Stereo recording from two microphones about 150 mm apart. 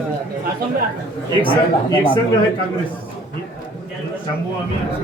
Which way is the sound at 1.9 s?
35° left (ahead or behind).